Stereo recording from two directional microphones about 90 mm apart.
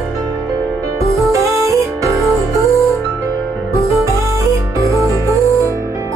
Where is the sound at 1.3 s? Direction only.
35° right (ahead or behind).